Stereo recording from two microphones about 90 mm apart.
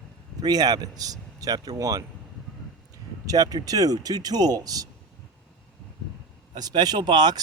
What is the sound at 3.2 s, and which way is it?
Speech, 45° right (ahead or behind).